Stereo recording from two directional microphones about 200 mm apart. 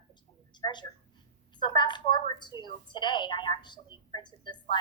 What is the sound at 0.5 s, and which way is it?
A woman's voice, 20° left (ahead or behind).